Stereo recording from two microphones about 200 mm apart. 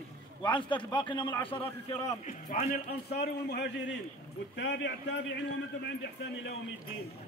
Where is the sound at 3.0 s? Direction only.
55° left (ahead or behind).